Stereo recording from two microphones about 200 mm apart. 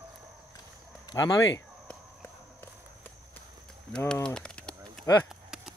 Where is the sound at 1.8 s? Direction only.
10° left (ahead or behind).